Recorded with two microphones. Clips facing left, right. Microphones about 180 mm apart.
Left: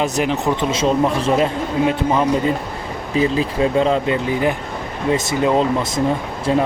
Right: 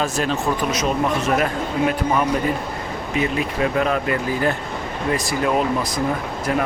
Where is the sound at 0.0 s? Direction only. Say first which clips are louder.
Left 3 dB; 20° left (ahead or behind).